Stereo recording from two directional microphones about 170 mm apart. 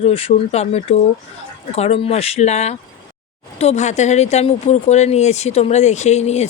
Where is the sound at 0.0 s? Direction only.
35° left (ahead or behind).